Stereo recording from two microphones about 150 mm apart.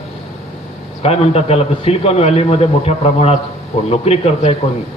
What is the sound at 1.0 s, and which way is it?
A man's voice, 40° left (ahead or behind).